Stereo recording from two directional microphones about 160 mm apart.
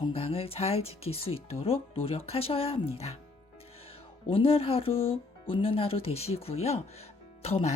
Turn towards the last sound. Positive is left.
turn(degrees=40)  # may be behind; listen again after turning